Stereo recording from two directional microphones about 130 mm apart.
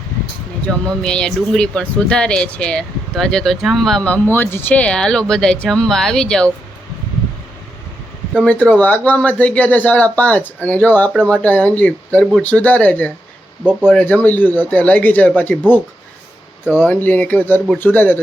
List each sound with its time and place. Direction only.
0.7 s speech: 5° left (ahead or behind)
8.4 s speech: 10° left (ahead or behind)
16.7 s speech: 15° left (ahead or behind)